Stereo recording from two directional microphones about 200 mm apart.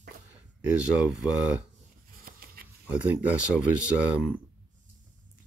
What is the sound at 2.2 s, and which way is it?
Dog, 50° right (ahead or behind).